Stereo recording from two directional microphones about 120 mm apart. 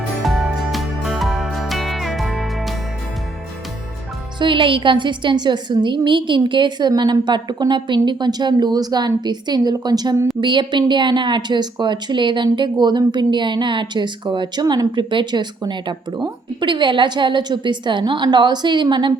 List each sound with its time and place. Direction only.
0.2 s music: centre (ahead or behind)
4.4 s a woman's voice: 45° right (ahead or behind)